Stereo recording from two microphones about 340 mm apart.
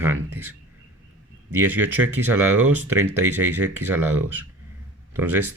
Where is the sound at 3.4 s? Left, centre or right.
Right.